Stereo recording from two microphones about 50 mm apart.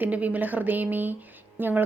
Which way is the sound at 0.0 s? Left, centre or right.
Right.